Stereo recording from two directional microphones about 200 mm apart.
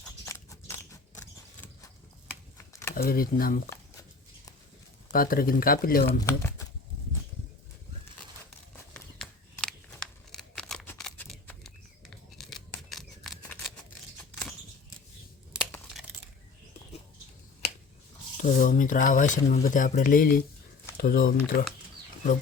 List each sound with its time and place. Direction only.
0.3 s biting: 15° left (ahead or behind)
2.6 s computer keyboard: 10° left (ahead or behind)
2.9 s speech: 45° left (ahead or behind)
5.1 s speech: 45° left (ahead or behind)
6.1 s speech: 15° left (ahead or behind)
8.7 s a sound: 5° left (ahead or behind)
10.3 s scissors: centre (ahead or behind)
15.7 s crumpling: centre (ahead or behind)
18.4 s speech: 40° left (ahead or behind)